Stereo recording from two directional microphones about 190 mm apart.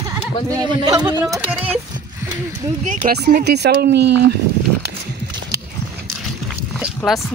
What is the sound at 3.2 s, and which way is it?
Speech, 60° right (ahead or behind).